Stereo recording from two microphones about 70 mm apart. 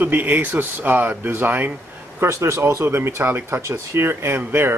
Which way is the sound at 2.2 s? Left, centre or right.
Right.